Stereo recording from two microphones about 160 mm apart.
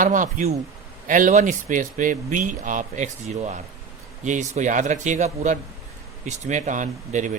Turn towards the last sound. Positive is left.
turn(degrees=-50)  # may be behind; listen again after turning